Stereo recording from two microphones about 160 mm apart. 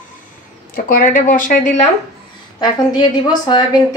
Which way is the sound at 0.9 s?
60° left (ahead or behind).